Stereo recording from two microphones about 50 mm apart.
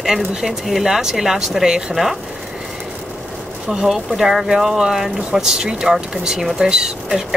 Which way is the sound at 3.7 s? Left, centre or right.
Centre.